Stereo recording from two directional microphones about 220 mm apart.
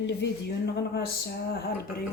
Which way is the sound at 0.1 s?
50° left (ahead or behind).